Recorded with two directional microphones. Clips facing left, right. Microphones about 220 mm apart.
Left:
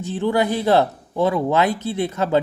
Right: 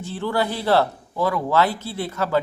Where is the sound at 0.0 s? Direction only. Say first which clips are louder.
Left 4 dB; 15° left (ahead or behind).